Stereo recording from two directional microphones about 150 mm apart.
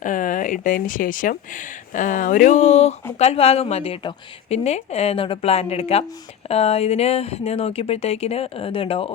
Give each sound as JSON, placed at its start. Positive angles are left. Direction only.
{"t": 0.0, "sound": "speech", "side_deg": 65}